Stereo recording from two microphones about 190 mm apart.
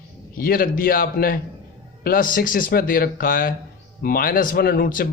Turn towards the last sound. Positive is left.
turn(degrees=50)  # may be behind; listen again after turning